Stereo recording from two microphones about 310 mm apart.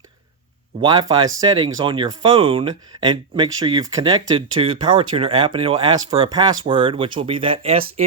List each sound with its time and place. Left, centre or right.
0.8 s speech: centre